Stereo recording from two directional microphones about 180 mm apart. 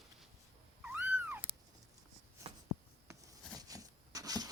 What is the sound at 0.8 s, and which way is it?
Cat, 10° right (ahead or behind).